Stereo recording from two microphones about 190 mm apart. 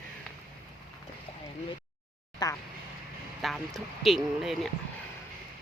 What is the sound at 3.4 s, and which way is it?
Speech, centre (ahead or behind).